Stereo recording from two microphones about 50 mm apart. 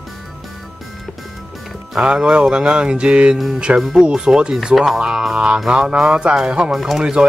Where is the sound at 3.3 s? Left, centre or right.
Centre.